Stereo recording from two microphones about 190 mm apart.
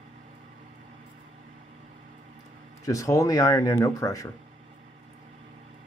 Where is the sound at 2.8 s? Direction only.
15° left (ahead or behind).